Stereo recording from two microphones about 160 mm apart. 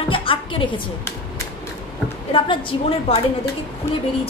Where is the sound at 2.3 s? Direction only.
35° left (ahead or behind).